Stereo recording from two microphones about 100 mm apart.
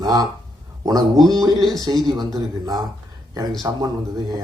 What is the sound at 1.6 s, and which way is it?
Speech, centre (ahead or behind).